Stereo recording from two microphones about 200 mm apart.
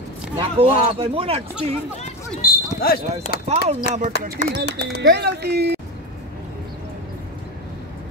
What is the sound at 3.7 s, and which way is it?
Speech, 35° right (ahead or behind).